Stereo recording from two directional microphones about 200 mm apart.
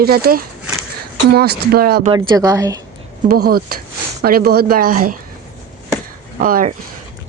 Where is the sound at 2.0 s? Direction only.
20° right (ahead or behind).